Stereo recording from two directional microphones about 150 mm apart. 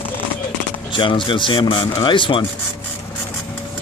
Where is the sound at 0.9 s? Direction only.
35° left (ahead or behind).